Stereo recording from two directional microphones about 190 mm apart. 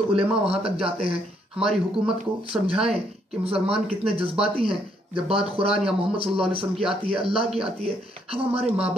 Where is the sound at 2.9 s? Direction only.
30° right (ahead or behind).